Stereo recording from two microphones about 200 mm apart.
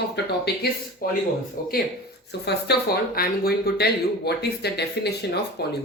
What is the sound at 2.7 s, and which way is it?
Speech, 55° left (ahead or behind).